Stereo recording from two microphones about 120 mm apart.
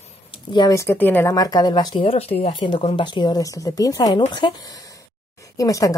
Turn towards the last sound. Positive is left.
turn(degrees=30)  # may be behind; listen again after turning